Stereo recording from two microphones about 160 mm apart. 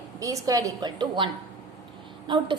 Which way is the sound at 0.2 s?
20° right (ahead or behind).